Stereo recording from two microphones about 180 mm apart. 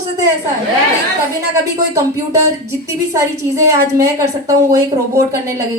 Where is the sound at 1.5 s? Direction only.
15° right (ahead or behind).